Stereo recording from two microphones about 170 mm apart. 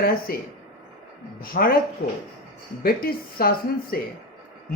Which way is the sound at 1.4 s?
60° left (ahead or behind).